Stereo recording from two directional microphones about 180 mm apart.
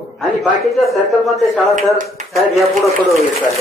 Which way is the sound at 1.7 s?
45° right (ahead or behind).